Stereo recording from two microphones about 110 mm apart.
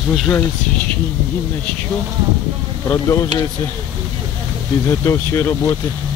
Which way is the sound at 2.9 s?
30° left (ahead or behind).